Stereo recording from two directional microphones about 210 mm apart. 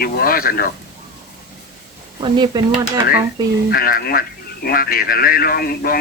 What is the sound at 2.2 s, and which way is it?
Speech, 20° right (ahead or behind).